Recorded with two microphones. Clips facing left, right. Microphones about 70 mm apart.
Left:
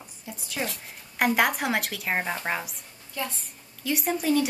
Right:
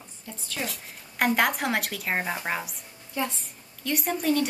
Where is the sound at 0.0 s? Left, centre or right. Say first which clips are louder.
Left 1 dB; centre.